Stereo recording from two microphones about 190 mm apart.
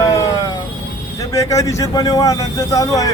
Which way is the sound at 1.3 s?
15° left (ahead or behind).